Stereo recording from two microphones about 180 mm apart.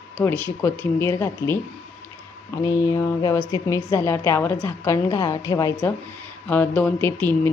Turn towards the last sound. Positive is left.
turn(degrees=10)  # may be behind; listen again after turning